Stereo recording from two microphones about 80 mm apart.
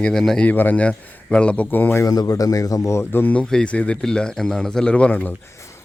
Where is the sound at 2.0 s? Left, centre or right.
Left.